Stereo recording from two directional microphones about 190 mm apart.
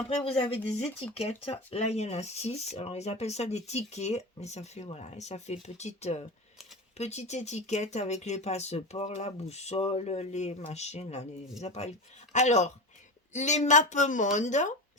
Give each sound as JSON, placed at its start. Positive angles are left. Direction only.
{"t": 0.3, "sound": "speech", "side_deg": 30}